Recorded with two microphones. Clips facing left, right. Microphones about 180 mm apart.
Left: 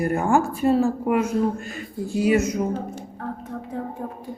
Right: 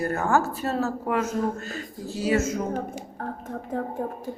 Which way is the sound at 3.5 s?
45° right (ahead or behind).